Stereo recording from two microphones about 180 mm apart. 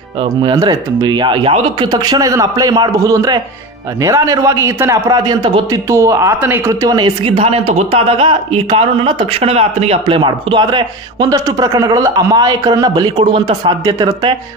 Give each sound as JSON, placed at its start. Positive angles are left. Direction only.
{"t": 0.4, "sound": "a man's voice", "side_deg": -25}
{"t": 7.3, "sound": "a man's voice", "side_deg": -35}